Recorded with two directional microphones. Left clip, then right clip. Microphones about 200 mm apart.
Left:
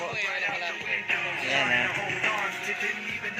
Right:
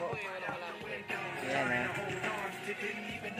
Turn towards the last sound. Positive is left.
turn(degrees=25)  # may be behind; listen again after turning